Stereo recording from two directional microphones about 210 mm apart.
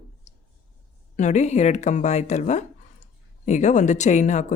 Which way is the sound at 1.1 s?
35° left (ahead or behind).